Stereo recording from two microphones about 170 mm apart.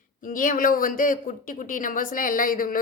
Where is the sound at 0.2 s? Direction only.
50° left (ahead or behind).